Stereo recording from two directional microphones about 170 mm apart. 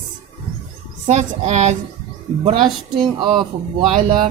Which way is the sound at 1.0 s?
45° right (ahead or behind).